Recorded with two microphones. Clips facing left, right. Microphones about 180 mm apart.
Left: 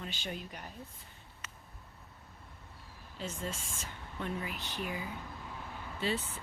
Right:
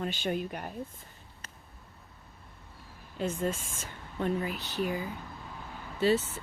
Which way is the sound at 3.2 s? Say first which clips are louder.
Right 9 dB; 55° right (ahead or behind).